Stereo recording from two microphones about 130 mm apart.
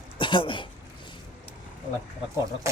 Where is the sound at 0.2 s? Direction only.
40° left (ahead or behind).